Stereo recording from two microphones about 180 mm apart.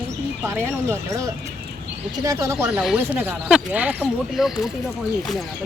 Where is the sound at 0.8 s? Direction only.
15° right (ahead or behind).